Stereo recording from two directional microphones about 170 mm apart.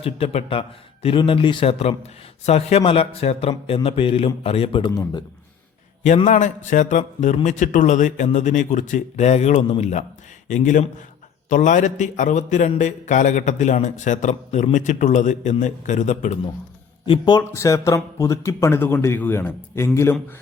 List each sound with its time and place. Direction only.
0.0 s a man's voice: 35° left (ahead or behind)
6.2 s speech: 45° left (ahead or behind)
17.1 s speech: 25° left (ahead or behind)